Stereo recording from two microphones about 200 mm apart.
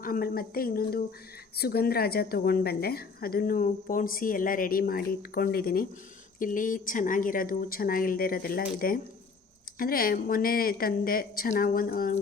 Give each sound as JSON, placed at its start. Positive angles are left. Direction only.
{"t": 0.0, "sound": "a woman's voice", "side_deg": 45}